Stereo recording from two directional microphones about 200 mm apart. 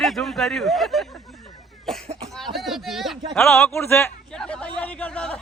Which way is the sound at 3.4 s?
10° left (ahead or behind).